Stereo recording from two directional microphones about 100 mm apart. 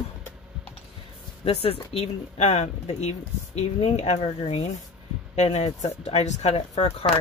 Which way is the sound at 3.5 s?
90° left.